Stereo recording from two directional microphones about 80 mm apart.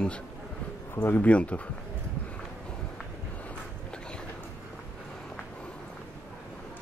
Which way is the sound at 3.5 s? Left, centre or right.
Centre.